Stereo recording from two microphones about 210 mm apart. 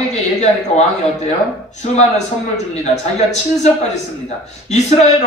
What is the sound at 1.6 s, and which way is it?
A man's voice, 35° left (ahead or behind).